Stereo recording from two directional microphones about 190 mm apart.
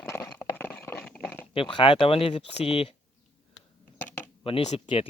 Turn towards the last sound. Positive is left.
turn(degrees=30)  # may be behind; listen again after turning